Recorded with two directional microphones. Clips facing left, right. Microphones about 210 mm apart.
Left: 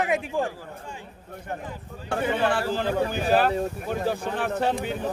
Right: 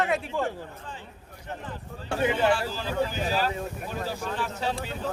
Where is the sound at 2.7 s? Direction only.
60° left (ahead or behind).